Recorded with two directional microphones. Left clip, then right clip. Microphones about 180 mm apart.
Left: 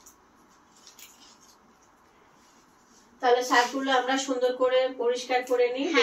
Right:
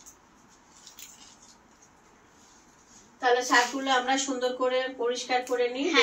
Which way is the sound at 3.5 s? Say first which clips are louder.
Even; 25° right (ahead or behind).